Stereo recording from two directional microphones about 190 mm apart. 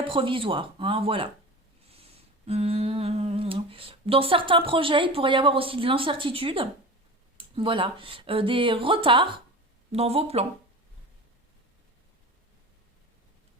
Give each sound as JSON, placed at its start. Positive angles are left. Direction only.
{"t": 0.0, "sound": "speech", "side_deg": -25}
{"t": 2.5, "sound": "speech", "side_deg": -30}